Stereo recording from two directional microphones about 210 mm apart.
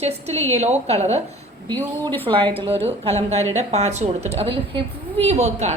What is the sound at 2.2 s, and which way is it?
A woman's voice, 25° right (ahead or behind).